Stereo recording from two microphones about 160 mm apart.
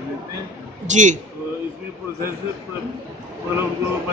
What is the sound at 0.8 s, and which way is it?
Speech, 50° right (ahead or behind).